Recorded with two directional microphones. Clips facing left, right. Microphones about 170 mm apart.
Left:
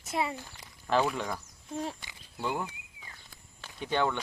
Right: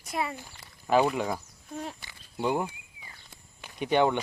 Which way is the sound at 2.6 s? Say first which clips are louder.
Right 4 dB; 15° right (ahead or behind).